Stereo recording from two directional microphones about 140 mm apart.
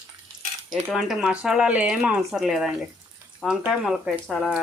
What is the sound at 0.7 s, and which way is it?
Speech, 5° right (ahead or behind).